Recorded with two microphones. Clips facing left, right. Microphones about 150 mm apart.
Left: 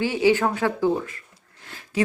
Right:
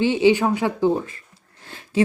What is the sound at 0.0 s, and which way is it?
Speech, 20° right (ahead or behind).